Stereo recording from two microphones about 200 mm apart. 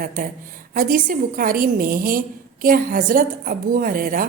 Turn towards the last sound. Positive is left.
turn(degrees=-45)  # may be behind; listen again after turning